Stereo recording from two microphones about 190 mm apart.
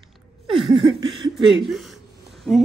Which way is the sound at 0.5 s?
25° right (ahead or behind).